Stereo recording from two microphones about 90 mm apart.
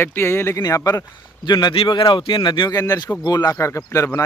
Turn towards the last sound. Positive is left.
turn(degrees=35)  # may be behind; listen again after turning